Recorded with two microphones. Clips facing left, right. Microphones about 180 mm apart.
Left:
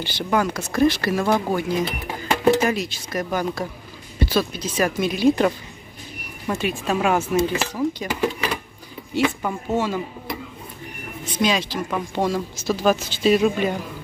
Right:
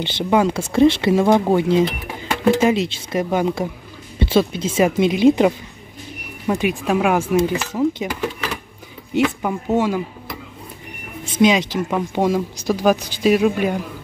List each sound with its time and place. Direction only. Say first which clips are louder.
0.0 s speech: right 5 dB; 25° right (ahead or behind)
9.1 s speech: right 3 dB; 15° right (ahead or behind)
11.2 s speech: right 6 dB; 20° right (ahead or behind)